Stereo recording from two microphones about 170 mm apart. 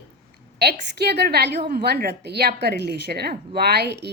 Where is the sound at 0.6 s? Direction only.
75° right (ahead or behind).